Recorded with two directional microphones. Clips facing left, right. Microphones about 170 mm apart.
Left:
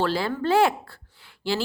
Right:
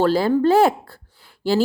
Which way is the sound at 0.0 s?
40° right (ahead or behind).